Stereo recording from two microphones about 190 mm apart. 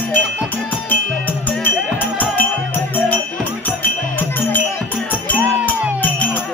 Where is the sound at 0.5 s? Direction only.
10° left (ahead or behind).